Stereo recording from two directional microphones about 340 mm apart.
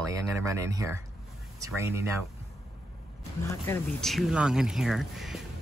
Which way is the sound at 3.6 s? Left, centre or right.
Centre.